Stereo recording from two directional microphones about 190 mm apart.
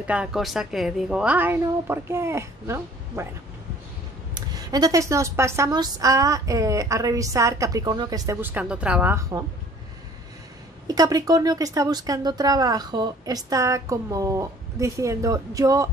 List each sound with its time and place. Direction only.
0.0 s a woman's voice: 5° right (ahead or behind)
4.6 s a woman's voice: 20° right (ahead or behind)
10.9 s speech: 20° right (ahead or behind)